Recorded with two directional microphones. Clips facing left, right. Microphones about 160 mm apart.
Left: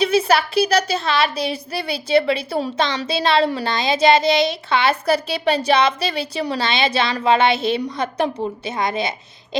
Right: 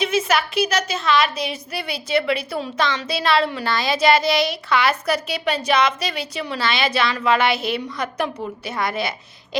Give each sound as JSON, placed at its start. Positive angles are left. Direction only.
{"t": 0.0, "sound": "a woman's voice", "side_deg": 35}